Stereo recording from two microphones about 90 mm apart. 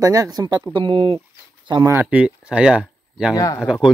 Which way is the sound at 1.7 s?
60° right (ahead or behind).